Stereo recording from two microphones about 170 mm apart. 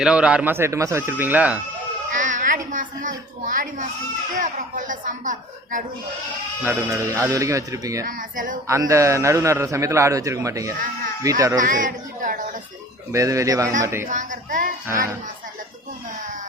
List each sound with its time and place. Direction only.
0.0 s a man's voice: 5° right (ahead or behind)
2.0 s a woman's voice: 50° right (ahead or behind)
6.6 s a man's voice: 15° right (ahead or behind)
8.0 s speech: 50° right (ahead or behind)
8.6 s a man's voice: 15° right (ahead or behind)
11.6 s speech: 50° right (ahead or behind)
13.1 s a man's voice: 20° right (ahead or behind)
14.1 s speech: 50° right (ahead or behind)